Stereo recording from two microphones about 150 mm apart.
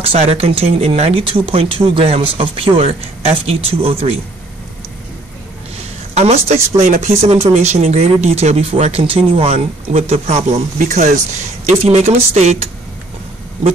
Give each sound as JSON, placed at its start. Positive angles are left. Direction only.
{"t": 0.0, "sound": "speech", "side_deg": -40}
{"t": 6.1, "sound": "speech", "side_deg": -45}